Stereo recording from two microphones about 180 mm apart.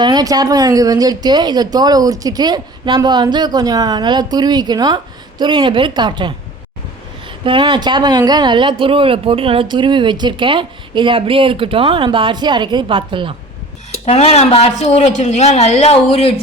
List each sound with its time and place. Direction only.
0.0 s speech: 20° right (ahead or behind)
7.4 s speech: 25° right (ahead or behind)
13.9 s speech: 35° left (ahead or behind)